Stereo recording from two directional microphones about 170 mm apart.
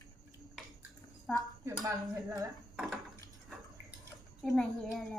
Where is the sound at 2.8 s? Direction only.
Centre (ahead or behind).